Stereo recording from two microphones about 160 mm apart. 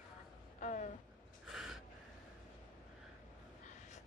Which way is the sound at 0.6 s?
50° left (ahead or behind).